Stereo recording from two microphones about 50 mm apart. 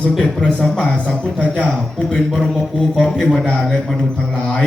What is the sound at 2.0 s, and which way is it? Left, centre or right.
A man's voice, centre.